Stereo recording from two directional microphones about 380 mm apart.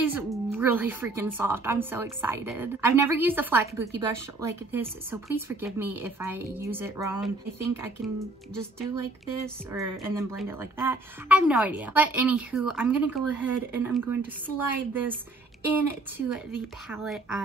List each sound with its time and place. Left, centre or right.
0.1 s speech: centre
16.3 s speech: centre